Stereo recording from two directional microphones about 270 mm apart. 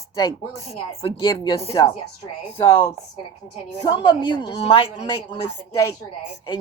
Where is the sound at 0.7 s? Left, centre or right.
Left.